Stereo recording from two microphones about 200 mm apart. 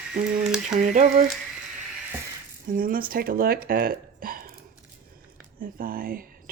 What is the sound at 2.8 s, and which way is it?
Speech, 45° right (ahead or behind).